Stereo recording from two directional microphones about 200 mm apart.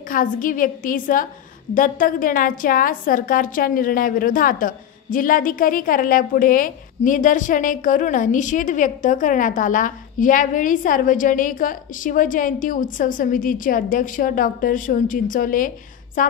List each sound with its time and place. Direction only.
0.1 s a woman's voice: 45° left (ahead or behind)